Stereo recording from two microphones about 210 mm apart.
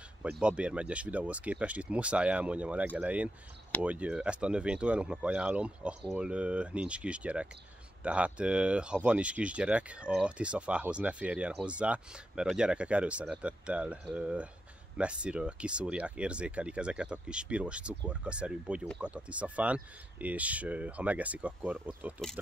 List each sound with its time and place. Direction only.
0.2 s speech: 5° right (ahead or behind)